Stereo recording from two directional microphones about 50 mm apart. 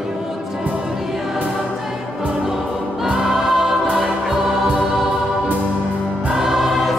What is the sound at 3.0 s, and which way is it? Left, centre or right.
Choir, centre.